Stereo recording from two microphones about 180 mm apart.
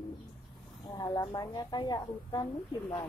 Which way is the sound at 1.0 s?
20° left (ahead or behind).